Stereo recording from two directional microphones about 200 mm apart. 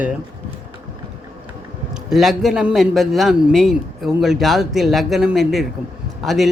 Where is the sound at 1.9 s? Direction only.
Centre (ahead or behind).